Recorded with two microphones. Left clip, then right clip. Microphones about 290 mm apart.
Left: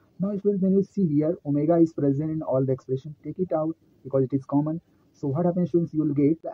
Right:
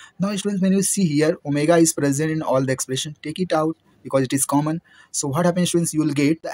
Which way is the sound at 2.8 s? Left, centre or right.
Right.